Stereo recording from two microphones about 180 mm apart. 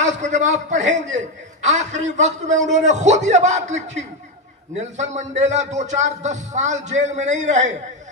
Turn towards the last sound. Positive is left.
turn(degrees=-40)  # may be behind; listen again after turning